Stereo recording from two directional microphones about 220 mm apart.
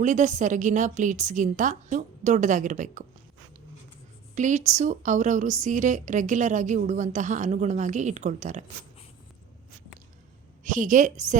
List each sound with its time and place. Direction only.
0.0 s a woman's voice: 35° right (ahead or behind)
4.4 s a woman's voice: 35° right (ahead or behind)
10.6 s a woman's voice: 35° right (ahead or behind)